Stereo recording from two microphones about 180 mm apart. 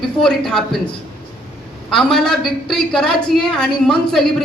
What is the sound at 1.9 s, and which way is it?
A woman's voice, centre (ahead or behind).